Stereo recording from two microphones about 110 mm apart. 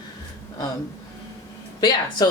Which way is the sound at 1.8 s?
40° left (ahead or behind).